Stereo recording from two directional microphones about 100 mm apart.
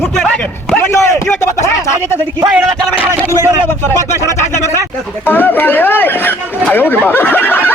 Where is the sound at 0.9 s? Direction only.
30° left (ahead or behind).